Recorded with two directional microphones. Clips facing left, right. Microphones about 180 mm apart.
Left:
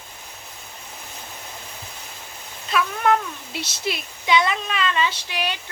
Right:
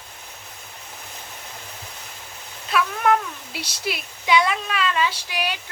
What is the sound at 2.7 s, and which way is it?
Speech, 5° right (ahead or behind).